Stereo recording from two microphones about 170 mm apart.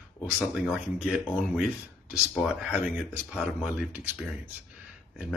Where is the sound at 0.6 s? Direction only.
5° right (ahead or behind).